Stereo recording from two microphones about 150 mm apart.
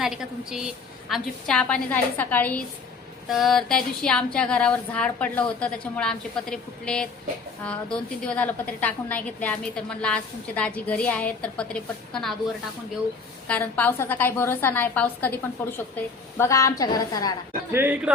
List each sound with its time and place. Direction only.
0.0 s a woman's voice: 5° right (ahead or behind)
3.2 s a woman's voice: centre (ahead or behind)
13.5 s a woman's voice: 10° left (ahead or behind)
17.7 s speech: 15° right (ahead or behind)